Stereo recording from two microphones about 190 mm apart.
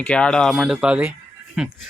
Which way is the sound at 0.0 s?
5° left (ahead or behind).